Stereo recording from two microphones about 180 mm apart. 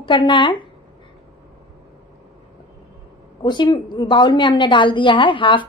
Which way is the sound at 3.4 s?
25° left (ahead or behind).